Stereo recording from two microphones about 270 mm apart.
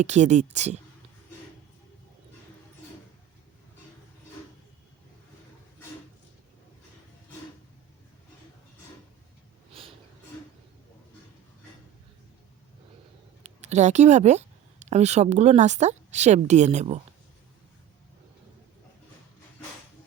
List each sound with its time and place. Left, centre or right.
0.0 s speech: right
13.4 s speech: right